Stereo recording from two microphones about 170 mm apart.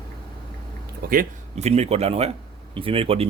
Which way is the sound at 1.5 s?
40° right (ahead or behind).